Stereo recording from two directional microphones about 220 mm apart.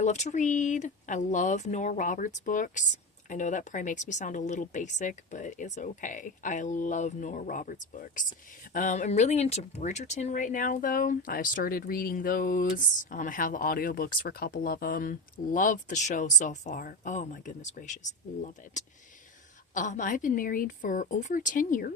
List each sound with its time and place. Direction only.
0.0 s speech: 30° left (ahead or behind)